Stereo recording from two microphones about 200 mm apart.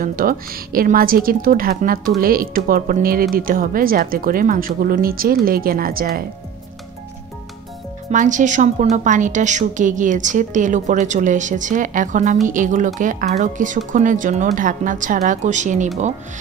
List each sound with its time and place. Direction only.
0.0 s a woman's voice: 45° right (ahead or behind)
8.1 s a woman's voice: 40° right (ahead or behind)